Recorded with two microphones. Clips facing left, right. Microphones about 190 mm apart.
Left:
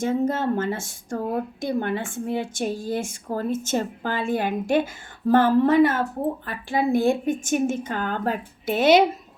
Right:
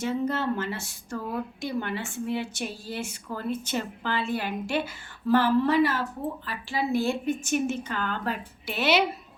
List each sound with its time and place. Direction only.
0.0 s speech: 50° left (ahead or behind)